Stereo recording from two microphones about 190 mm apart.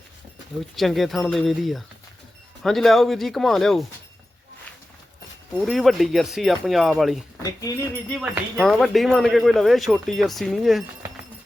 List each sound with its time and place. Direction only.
0.8 s speech: centre (ahead or behind)
5.5 s speech: centre (ahead or behind)
7.7 s a sound: 20° left (ahead or behind)
8.1 s speech: centre (ahead or behind)